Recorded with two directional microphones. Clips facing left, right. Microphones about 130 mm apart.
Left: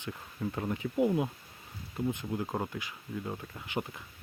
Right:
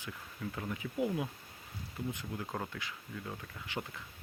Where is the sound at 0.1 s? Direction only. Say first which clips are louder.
Left 6 dB; 35° left (ahead or behind); by 4.0 s 20° left (ahead or behind).